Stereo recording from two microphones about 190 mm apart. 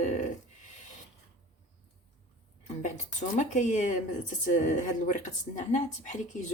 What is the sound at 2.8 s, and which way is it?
Speech, 40° left (ahead or behind).